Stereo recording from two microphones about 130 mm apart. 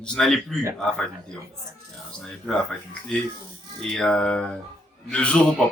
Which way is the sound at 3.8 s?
5° left (ahead or behind).